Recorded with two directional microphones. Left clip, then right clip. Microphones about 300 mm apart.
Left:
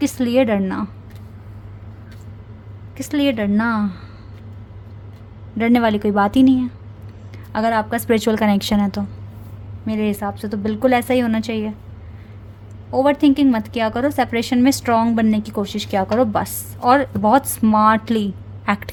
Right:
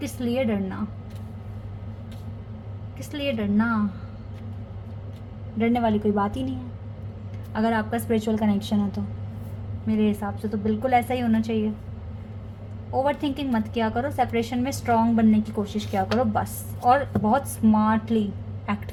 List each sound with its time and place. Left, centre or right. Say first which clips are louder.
0.0 s a woman's voice: left 9 dB; left
3.0 s a woman's voice: left 9 dB; left
5.5 s a woman's voice: left 6 dB; left
7.5 s a woman's voice: left 6 dB; left
9.8 s a woman's voice: left 4 dB; left
13.0 s a woman's voice: left 10 dB; left